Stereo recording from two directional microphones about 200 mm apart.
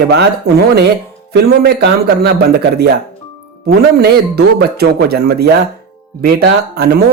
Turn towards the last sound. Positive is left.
turn(degrees=-55)  # may be behind; listen again after turning